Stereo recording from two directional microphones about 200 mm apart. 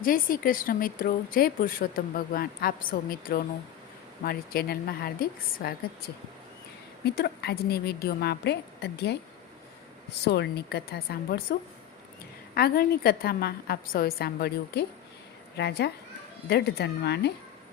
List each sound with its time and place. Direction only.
0.0 s a woman's voice: 45° left (ahead or behind)
10.2 s a woman's voice: 55° left (ahead or behind)
12.5 s a woman's voice: 50° left (ahead or behind)